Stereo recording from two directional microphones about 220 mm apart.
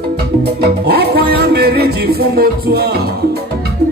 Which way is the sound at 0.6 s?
45° right (ahead or behind).